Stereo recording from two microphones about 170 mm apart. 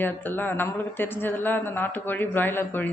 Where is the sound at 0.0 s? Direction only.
10° left (ahead or behind).